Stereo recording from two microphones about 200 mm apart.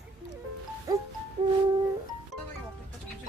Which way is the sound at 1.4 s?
30° right (ahead or behind).